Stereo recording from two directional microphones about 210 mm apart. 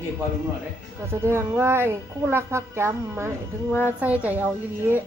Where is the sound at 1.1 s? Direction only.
10° right (ahead or behind).